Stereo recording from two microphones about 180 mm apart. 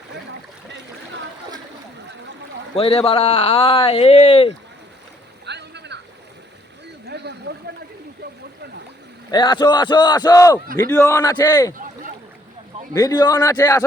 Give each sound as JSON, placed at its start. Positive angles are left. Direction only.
{"t": 2.7, "sound": "speech", "side_deg": 35}
{"t": 5.5, "sound": "boat", "side_deg": -70}
{"t": 7.1, "sound": "a sound", "side_deg": -70}
{"t": 9.3, "sound": "a man's voice", "side_deg": 25}
{"t": 12.9, "sound": "a man's voice", "side_deg": 20}